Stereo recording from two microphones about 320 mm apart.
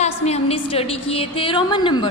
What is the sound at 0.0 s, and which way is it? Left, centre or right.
A woman's voice, centre.